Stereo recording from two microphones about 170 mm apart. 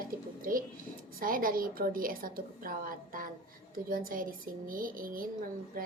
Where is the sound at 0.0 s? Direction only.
55° right (ahead or behind).